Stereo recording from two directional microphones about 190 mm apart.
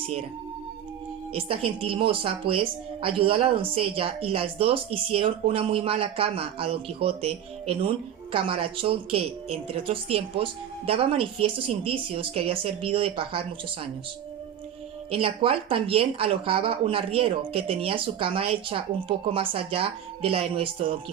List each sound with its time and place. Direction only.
1.3 s speech: 30° right (ahead or behind)
15.1 s speech: 30° right (ahead or behind)